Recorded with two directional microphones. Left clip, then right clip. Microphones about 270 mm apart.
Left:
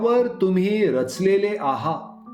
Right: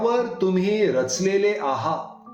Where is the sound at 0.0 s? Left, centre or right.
Left.